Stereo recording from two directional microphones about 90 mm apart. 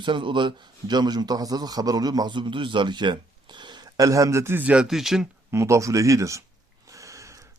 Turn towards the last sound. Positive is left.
turn(degrees=-35)  # may be behind; listen again after turning